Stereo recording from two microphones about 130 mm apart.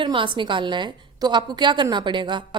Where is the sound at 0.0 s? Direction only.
40° right (ahead or behind).